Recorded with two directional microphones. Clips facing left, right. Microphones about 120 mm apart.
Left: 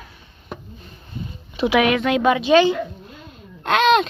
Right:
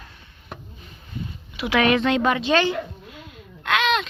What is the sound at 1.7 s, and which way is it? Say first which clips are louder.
Speech: left 3 dB; 15° left (ahead or behind).